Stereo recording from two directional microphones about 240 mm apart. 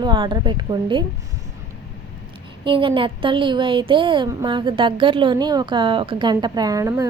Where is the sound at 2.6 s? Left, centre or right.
Right.